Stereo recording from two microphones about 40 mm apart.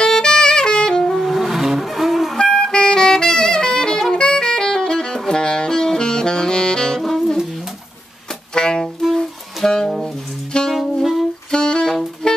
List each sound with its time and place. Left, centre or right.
0.0 s saxophone: centre
1.1 s vehicle: centre
2.3 s saxophone: centre
7.0 s music: centre
8.5 s saxophone: centre
8.8 s saxophone: centre
10.7 s saxophone: centre
11.5 s saxophone: centre